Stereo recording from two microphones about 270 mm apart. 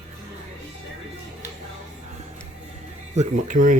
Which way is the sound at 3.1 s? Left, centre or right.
Right.